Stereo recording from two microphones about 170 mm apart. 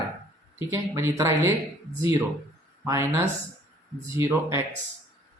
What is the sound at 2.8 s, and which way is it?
Speech, 15° right (ahead or behind).